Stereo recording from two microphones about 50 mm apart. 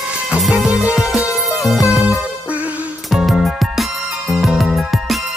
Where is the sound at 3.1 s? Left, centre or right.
Centre.